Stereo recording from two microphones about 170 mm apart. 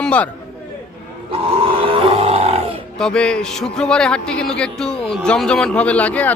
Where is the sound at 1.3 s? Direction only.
30° right (ahead or behind).